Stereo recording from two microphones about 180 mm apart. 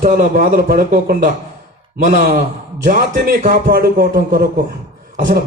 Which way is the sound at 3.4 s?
55° right (ahead or behind).